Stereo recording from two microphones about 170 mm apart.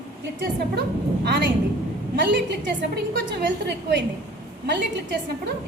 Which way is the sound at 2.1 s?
90° right.